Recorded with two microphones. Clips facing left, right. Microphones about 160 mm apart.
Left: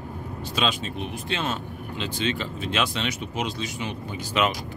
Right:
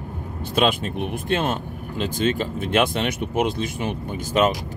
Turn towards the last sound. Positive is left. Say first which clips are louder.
# right 5 dB
turn(degrees=-45)  # may be behind; listen again after turning